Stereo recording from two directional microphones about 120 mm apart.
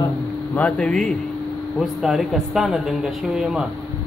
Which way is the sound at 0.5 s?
10° left (ahead or behind).